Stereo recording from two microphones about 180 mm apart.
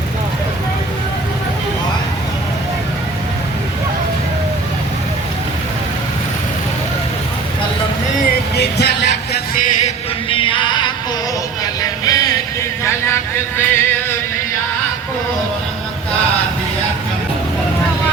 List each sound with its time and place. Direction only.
8.5 s music: 65° left (ahead or behind)
9.8 s music: 30° left (ahead or behind)
11.6 s vehicle: 20° left (ahead or behind)
12.8 s a sound: 15° left (ahead or behind)